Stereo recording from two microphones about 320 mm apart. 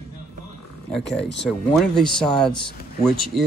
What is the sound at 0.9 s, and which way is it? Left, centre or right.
Speech, centre.